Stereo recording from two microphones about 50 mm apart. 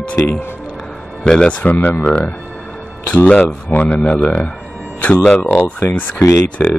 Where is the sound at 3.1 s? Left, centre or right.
Left.